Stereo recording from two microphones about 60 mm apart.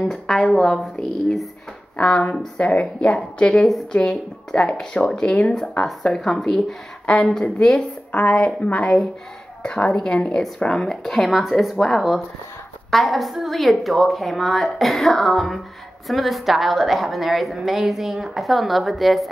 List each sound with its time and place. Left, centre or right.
0.1 s a woman's voice: centre
2.0 s a woman's voice: centre
4.0 s speech: centre
7.1 s a woman's voice: left; by 19.2 s centre